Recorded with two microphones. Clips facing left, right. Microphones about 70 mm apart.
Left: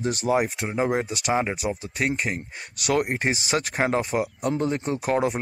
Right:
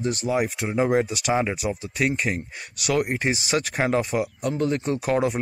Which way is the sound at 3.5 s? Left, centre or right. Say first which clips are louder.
Right 1 dB; left.